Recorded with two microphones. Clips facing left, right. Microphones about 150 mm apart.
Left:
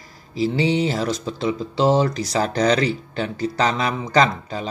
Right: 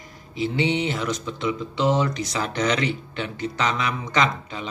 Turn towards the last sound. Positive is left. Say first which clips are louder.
# left 5 dB
turn(degrees=35)  # may be behind; listen again after turning